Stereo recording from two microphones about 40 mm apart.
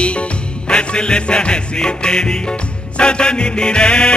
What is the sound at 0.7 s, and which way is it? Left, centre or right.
Music, left.